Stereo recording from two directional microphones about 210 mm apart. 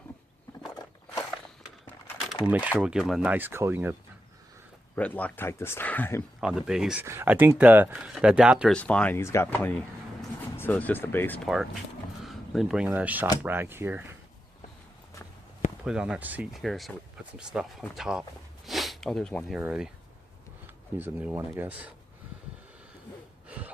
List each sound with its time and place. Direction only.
2.3 s speech: 5° right (ahead or behind)
4.9 s speech: 5° left (ahead or behind)
6.4 s speech: 5° right (ahead or behind)
11.4 s speech: centre (ahead or behind)
15.8 s speech: 5° right (ahead or behind)
21.0 s speech: 10° right (ahead or behind)
23.5 s a sound: 5° right (ahead or behind)